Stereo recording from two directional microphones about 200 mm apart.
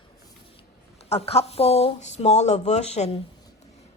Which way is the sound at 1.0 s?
30° left (ahead or behind).